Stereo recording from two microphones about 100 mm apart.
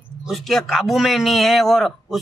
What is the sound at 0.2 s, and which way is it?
A man's voice, centre (ahead or behind).